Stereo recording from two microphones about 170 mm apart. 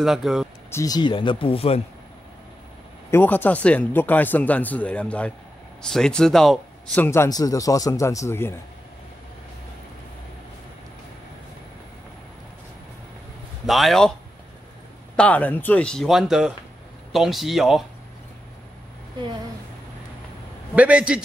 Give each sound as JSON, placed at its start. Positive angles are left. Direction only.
{"t": 0.0, "sound": "speech", "side_deg": 0}
{"t": 0.7, "sound": "speech", "side_deg": 20}
{"t": 3.1, "sound": "speech", "side_deg": 10}
{"t": 7.1, "sound": "speech", "side_deg": 20}
{"t": 13.7, "sound": "speech", "side_deg": 0}
{"t": 15.1, "sound": "speech", "side_deg": 10}
{"t": 20.7, "sound": "a man's voice", "side_deg": -5}